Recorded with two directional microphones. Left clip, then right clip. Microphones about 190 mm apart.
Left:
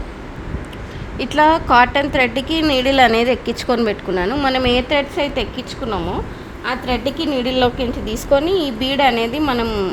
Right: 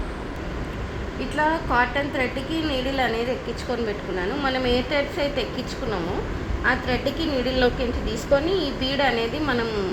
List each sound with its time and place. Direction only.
1.4 s a woman's voice: 65° left (ahead or behind)